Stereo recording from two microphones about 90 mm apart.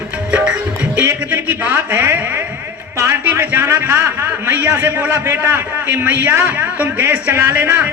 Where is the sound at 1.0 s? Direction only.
20° right (ahead or behind).